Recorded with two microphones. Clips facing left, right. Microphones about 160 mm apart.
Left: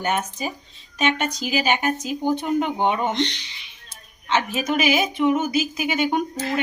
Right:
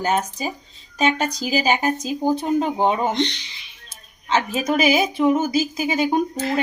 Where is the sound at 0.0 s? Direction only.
35° right (ahead or behind).